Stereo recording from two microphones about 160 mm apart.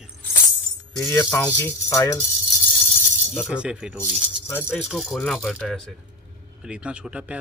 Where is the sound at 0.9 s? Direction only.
20° left (ahead or behind).